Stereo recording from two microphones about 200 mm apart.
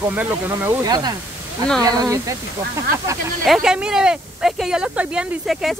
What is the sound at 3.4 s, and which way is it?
Speech, centre (ahead or behind).